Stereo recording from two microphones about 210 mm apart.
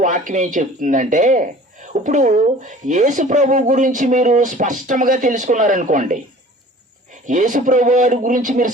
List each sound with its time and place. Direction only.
0.0 s speech: 40° right (ahead or behind)
7.3 s speech: 35° right (ahead or behind)